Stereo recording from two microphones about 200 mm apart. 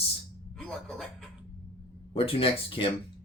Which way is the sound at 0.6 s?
Centre (ahead or behind).